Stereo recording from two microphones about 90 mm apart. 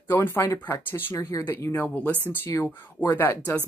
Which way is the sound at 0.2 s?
25° left (ahead or behind).